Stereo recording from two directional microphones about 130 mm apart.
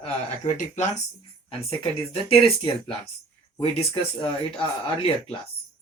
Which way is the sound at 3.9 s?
40° left (ahead or behind).